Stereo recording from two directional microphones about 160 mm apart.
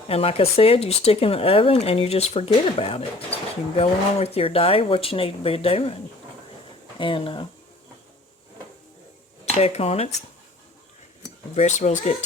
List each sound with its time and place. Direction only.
0.1 s speech: 35° left (ahead or behind)
7.0 s speech: 35° left (ahead or behind)
9.6 s speech: 40° left (ahead or behind)
11.5 s speech: 45° left (ahead or behind)